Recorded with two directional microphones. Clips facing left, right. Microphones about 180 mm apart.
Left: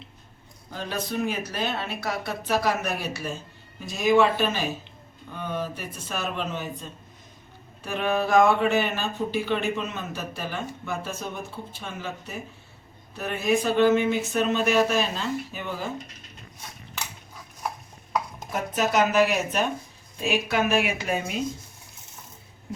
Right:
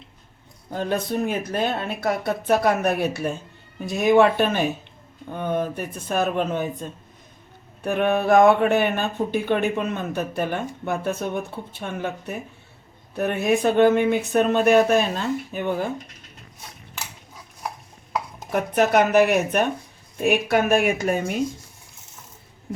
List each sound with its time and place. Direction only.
0.7 s speech: 50° right (ahead or behind)
18.5 s speech: 60° right (ahead or behind)